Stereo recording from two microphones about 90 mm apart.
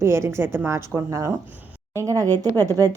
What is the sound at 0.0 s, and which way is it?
Speech, 30° right (ahead or behind).